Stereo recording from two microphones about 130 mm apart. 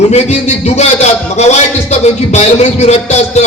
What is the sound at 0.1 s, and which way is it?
A man's voice, 60° left (ahead or behind).